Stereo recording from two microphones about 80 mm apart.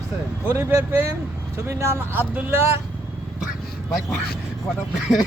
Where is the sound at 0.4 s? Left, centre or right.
Right.